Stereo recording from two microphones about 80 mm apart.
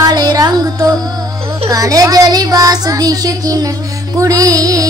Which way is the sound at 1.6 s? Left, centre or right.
Right.